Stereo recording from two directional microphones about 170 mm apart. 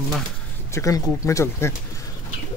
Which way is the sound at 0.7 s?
20° left (ahead or behind).